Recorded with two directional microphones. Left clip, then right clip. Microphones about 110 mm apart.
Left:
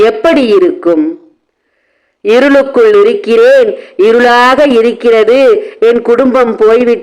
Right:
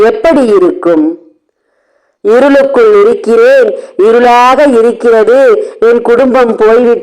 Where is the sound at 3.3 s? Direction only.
25° right (ahead or behind).